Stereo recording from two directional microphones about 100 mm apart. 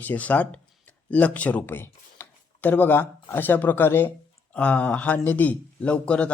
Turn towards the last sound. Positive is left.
turn(degrees=10)  # may be behind; listen again after turning